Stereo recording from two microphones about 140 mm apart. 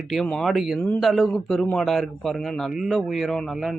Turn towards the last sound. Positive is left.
turn(degrees=0)  # may be behind; listen again after turning